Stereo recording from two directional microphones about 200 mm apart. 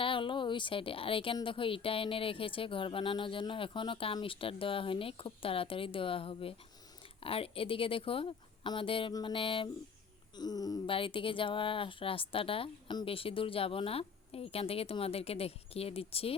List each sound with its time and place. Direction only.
0.0 s a woman's voice: 25° left (ahead or behind)